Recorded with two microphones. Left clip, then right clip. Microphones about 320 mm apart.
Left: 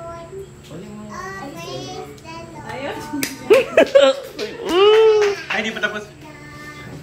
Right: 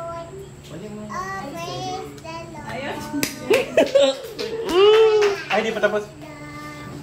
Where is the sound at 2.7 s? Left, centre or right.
Centre.